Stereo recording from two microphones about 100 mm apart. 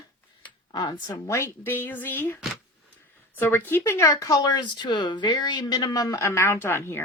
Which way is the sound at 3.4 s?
20° left (ahead or behind).